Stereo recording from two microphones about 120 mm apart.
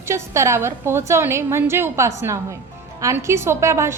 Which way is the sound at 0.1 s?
25° right (ahead or behind).